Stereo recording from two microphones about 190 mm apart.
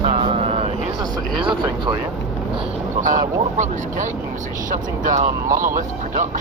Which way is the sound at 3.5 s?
40° right (ahead or behind).